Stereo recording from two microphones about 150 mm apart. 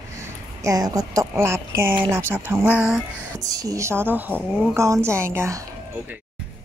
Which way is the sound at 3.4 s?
25° right (ahead or behind).